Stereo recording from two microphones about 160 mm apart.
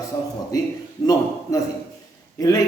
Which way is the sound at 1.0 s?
25° left (ahead or behind).